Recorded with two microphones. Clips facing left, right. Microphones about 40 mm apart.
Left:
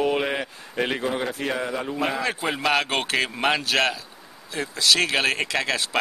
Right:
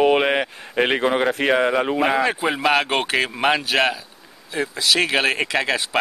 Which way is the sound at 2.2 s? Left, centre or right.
Centre.